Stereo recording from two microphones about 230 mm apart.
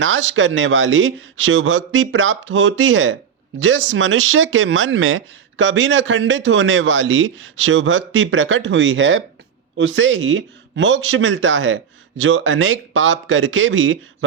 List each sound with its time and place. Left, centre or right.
0.0 s speech: right